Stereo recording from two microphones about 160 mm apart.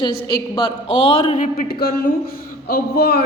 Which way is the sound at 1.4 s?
65° left (ahead or behind).